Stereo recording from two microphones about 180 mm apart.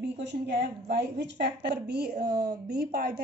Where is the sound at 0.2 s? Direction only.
75° right (ahead or behind).